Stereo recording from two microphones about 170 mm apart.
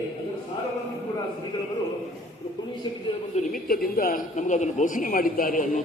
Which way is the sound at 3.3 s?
40° left (ahead or behind).